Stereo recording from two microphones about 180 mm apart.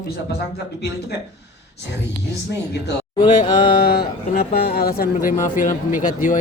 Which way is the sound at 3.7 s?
60° left (ahead or behind).